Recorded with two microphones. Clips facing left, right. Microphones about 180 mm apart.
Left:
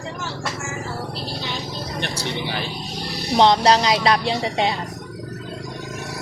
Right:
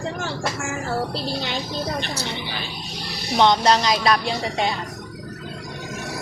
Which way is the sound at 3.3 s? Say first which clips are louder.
Left 2 dB; 30° left (ahead or behind).